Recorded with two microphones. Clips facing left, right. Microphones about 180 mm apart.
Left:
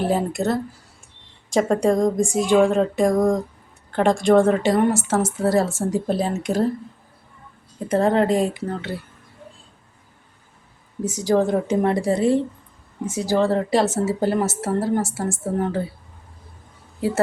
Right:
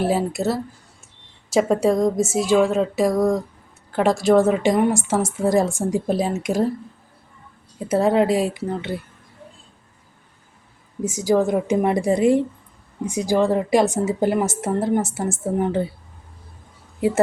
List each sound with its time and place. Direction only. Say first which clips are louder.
0.0 s a woman's voice: right 1 dB; 5° right (ahead or behind)
7.9 s a woman's voice: right 1 dB; 10° right (ahead or behind)
11.0 s a woman's voice: right 1 dB; 10° right (ahead or behind)